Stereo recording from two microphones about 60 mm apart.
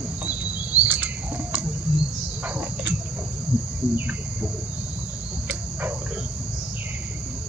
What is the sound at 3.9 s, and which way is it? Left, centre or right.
Cricket, right.